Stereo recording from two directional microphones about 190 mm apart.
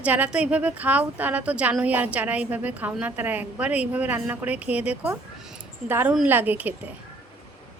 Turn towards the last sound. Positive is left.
turn(degrees=-10)  # may be behind; listen again after turning